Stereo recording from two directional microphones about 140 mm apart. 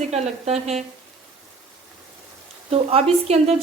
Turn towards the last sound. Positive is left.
turn(degrees=-50)  # may be behind; listen again after turning